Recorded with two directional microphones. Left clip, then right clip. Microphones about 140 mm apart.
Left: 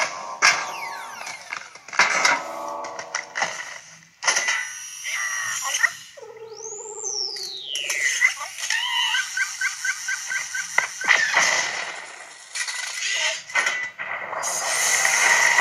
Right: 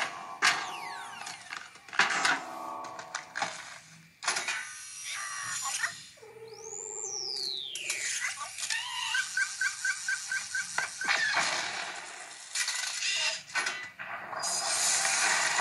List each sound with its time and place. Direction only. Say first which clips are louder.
0.0 s a sound: left 9 dB; 30° left (ahead or behind)
7.0 s music: left 7 dB; 30° left (ahead or behind)
12.5 s creak: left 5 dB; 30° left (ahead or behind)